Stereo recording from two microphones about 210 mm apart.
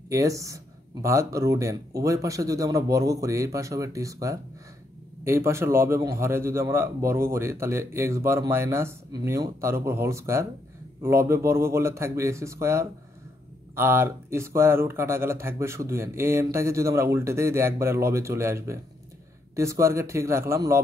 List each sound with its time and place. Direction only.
0.1 s a man's voice: 15° right (ahead or behind)